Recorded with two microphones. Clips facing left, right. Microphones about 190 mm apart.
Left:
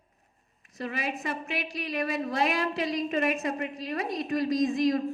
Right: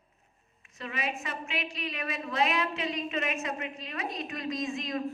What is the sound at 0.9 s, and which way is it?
A woman's voice, 40° left (ahead or behind).